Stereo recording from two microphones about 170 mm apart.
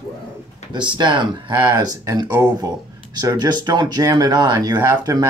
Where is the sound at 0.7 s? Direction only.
25° right (ahead or behind).